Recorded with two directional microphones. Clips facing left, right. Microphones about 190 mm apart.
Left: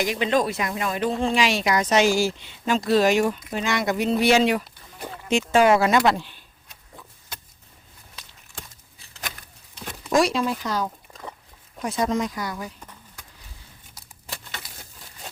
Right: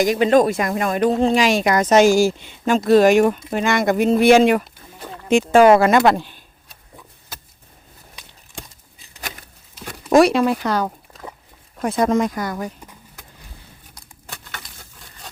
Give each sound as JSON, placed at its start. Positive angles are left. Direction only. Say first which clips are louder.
{"t": 0.0, "sound": "speech", "louder": "right 8 dB", "side_deg": -45}
{"t": 10.1, "sound": "speech", "louder": "right 7 dB", "side_deg": -60}